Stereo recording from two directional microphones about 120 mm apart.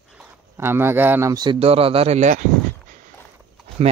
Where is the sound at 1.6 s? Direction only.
55° right (ahead or behind); by 2.4 s 80° right.